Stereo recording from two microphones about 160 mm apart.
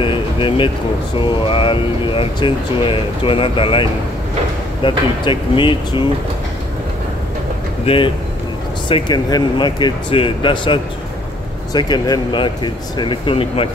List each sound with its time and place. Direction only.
0.0 s a sound: 35° left (ahead or behind)
1.2 s speech: 30° left (ahead or behind)
7.8 s speech: 35° left (ahead or behind)